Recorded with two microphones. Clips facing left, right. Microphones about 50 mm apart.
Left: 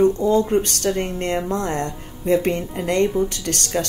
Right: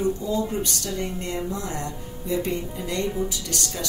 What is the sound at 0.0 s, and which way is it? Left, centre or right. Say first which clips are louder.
Speech: left 8 dB; left.